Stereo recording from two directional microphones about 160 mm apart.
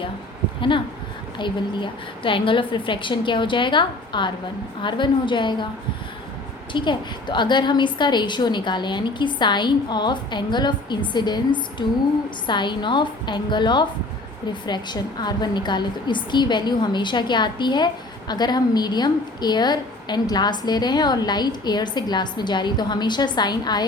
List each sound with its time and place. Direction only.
1.4 s a woman's voice: 30° left (ahead or behind)
6.7 s a woman's voice: 30° left (ahead or behind)